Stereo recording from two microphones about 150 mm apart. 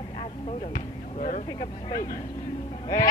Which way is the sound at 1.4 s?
30° left (ahead or behind).